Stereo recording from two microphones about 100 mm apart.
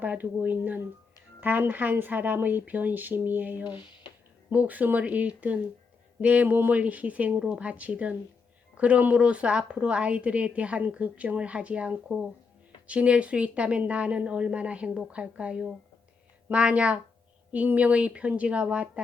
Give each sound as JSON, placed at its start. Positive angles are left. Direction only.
{"t": 0.0, "sound": "a woman's voice", "side_deg": -15}